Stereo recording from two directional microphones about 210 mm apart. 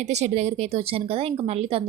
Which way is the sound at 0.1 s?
30° right (ahead or behind).